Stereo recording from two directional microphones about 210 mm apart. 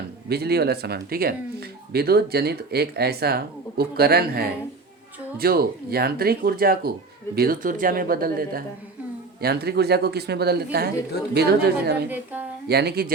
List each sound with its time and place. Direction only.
0.3 s speech: 50° right (ahead or behind)
12.0 s a woman's voice: 10° right (ahead or behind)
12.6 s speech: 50° right (ahead or behind)